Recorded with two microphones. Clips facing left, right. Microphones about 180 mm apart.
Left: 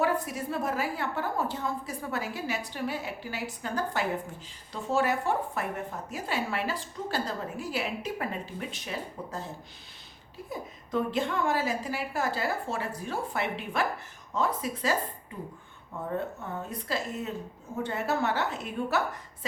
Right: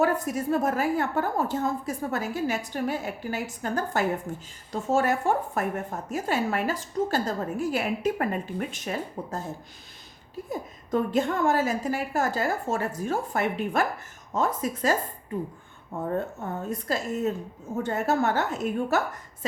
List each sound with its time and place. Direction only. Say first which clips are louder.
0.0 s speech: right 4 dB; 45° right (ahead or behind)
10.5 s speech: right 4 dB; 45° right (ahead or behind)
16.0 s speech: right 3 dB; 45° right (ahead or behind)